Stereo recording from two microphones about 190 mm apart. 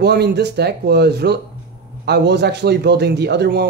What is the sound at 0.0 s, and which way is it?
Speech, 60° right (ahead or behind).